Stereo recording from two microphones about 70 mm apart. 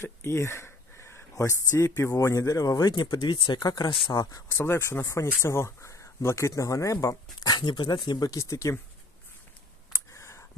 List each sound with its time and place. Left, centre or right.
0.0 s a sound: left
1.3 s speech: left
2.1 s speech: left
4.6 s speech: left
5.0 s speech: left
7.4 s speech: left
9.9 s a sound: left